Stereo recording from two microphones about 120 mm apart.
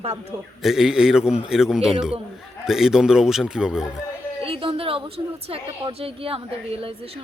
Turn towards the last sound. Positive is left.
turn(degrees=-50)  # may be behind; listen again after turning